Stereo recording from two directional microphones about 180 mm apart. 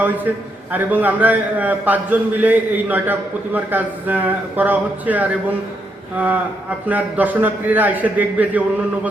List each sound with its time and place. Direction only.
0.7 s a man's voice: 10° right (ahead or behind)